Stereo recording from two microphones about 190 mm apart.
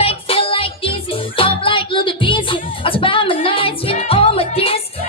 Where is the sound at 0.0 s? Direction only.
30° left (ahead or behind).